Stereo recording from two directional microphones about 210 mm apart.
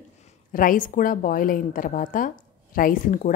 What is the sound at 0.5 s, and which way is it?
A woman's voice, 40° left (ahead or behind).